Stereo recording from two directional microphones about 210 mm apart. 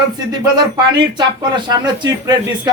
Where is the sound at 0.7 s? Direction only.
20° right (ahead or behind).